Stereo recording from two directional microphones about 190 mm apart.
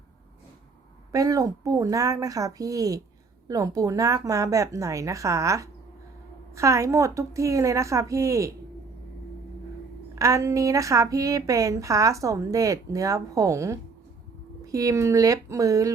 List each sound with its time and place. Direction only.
1.1 s a woman's voice: 20° right (ahead or behind)
10.2 s a woman's voice: 15° right (ahead or behind)